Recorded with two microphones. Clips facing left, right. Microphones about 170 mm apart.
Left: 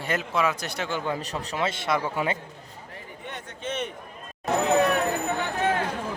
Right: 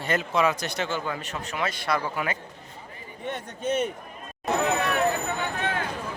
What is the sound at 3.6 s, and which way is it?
Speech, 5° right (ahead or behind).